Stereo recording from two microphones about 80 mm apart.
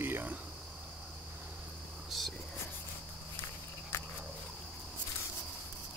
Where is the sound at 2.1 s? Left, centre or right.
Centre.